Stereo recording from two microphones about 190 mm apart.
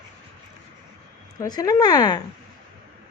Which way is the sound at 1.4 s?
20° left (ahead or behind).